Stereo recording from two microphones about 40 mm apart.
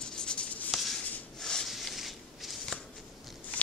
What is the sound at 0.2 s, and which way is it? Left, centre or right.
Writing, left.